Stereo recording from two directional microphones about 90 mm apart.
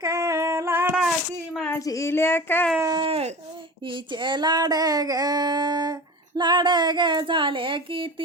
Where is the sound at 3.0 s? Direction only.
80° right.